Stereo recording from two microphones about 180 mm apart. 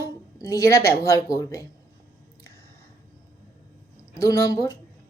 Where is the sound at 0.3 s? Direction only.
15° left (ahead or behind).